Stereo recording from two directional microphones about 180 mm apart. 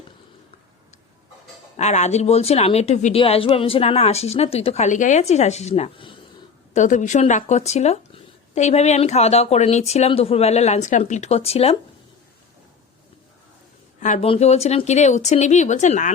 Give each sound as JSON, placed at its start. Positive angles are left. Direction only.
{"t": 1.7, "sound": "speech", "side_deg": 40}
{"t": 6.7, "sound": "speech", "side_deg": 45}
{"t": 14.0, "sound": "speech", "side_deg": 45}